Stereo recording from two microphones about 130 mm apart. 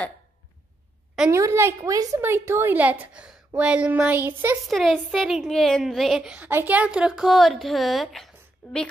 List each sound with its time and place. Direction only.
1.3 s a woman's voice: 20° right (ahead or behind)
4.6 s a woman's voice: centre (ahead or behind)